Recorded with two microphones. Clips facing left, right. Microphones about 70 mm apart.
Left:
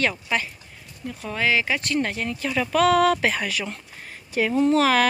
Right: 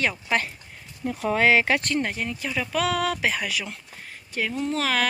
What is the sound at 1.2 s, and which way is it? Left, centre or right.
Speech, right.